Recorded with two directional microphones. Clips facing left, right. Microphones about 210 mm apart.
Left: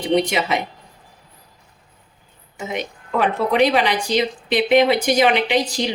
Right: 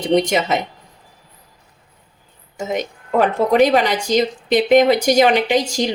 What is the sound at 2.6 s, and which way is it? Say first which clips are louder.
A woman's voice: right 4 dB; 45° right (ahead or behind).